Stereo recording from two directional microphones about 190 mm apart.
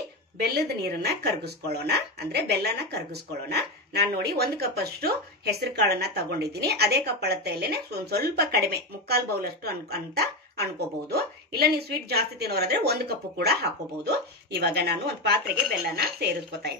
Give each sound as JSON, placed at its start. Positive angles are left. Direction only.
{"t": 0.4, "sound": "speech", "side_deg": -55}